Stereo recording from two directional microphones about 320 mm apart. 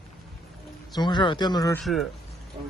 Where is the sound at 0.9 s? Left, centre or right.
Centre.